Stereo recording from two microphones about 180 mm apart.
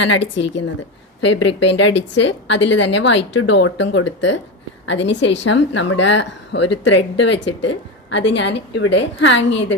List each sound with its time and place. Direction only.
0.0 s a woman's voice: 90° left